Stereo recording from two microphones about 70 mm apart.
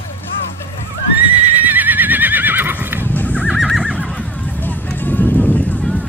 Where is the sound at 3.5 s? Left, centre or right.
Centre.